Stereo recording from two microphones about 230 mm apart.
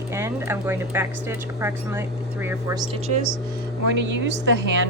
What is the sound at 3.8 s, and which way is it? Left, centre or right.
Speech, right.